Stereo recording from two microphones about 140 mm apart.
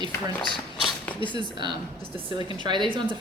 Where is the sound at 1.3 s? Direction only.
35° right (ahead or behind).